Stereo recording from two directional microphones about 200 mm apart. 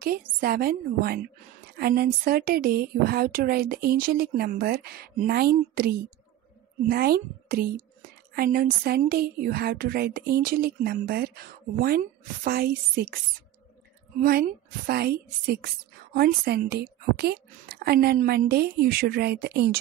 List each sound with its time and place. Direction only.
0.1 s speech: 50° right (ahead or behind)
14.9 s speech: 50° right (ahead or behind)